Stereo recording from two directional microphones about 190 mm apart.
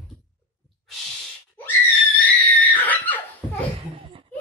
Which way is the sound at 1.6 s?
10° left (ahead or behind).